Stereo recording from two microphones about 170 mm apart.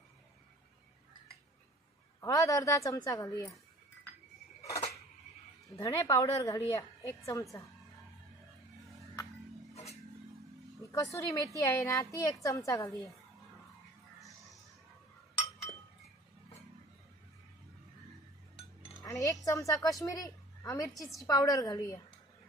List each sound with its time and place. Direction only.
2.1 s a woman's voice: 20° left (ahead or behind)
4.6 s a sound: 20° left (ahead or behind)
5.8 s a woman's voice: 20° left (ahead or behind)
10.9 s a woman's voice: 20° left (ahead or behind)
19.0 s a woman's voice: 20° left (ahead or behind)